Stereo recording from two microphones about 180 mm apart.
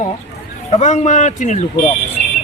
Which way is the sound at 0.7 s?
40° left (ahead or behind).